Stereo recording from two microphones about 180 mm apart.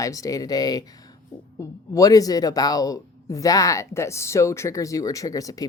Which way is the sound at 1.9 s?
20° left (ahead or behind).